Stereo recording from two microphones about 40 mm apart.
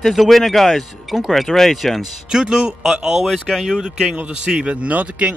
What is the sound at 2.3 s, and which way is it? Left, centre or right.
Speech, centre.